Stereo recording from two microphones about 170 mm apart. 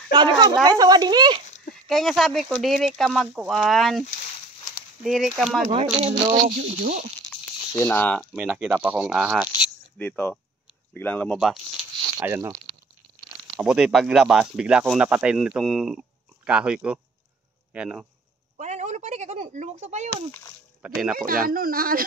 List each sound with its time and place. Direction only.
0.1 s speech: 25° right (ahead or behind)
1.9 s speech: centre (ahead or behind)
5.0 s speech: centre (ahead or behind)
5.7 s speech: 35° right (ahead or behind)
7.2 s a sound: 15° left (ahead or behind)
8.2 s speech: 5° right (ahead or behind)
9.9 s speech: 10° left (ahead or behind)
11.3 s speech: centre (ahead or behind)
12.2 s speech: 15° right (ahead or behind)
13.6 s speech: 5° right (ahead or behind)
18.6 s speech: 45° right (ahead or behind)
20.8 s speech: 5° right (ahead or behind)
21.3 s speech: 55° right (ahead or behind)